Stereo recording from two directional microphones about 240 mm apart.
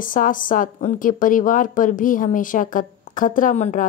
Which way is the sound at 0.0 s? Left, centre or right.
Left.